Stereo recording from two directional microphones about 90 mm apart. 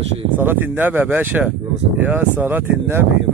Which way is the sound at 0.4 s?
25° right (ahead or behind).